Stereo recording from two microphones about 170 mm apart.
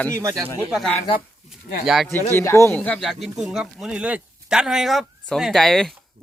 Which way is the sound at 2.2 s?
15° left (ahead or behind).